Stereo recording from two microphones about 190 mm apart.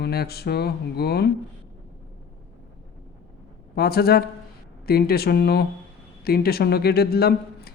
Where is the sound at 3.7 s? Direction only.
55° left (ahead or behind).